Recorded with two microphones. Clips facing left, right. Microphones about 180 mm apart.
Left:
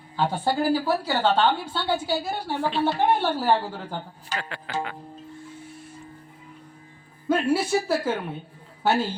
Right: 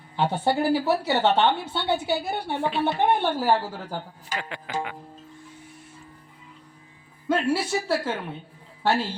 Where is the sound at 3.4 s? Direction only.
10° right (ahead or behind).